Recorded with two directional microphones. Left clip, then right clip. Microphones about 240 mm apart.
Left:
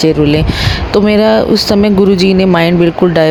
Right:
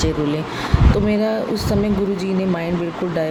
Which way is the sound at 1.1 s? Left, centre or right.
Left.